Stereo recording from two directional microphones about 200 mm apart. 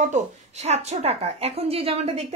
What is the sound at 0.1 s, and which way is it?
A woman's voice, 35° right (ahead or behind).